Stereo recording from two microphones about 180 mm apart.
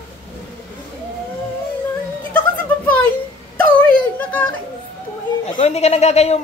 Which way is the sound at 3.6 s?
10° left (ahead or behind).